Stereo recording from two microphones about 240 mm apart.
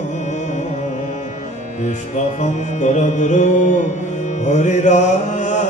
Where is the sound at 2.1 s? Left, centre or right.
Left.